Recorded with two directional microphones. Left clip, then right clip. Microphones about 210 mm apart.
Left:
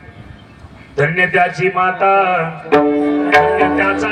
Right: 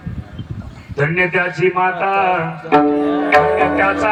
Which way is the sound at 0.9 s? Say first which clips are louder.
Left 3 dB; 40° left (ahead or behind).